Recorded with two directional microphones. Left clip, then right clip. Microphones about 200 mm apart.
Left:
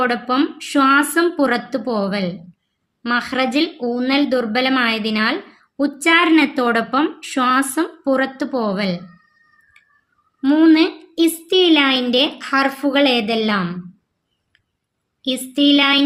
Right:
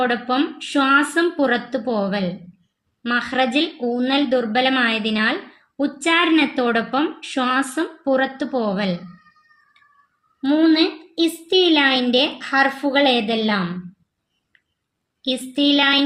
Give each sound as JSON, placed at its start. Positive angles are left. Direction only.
{"t": 0.0, "sound": "speech", "side_deg": 30}
{"t": 10.4, "sound": "a woman's voice", "side_deg": 30}
{"t": 15.3, "sound": "speech", "side_deg": 25}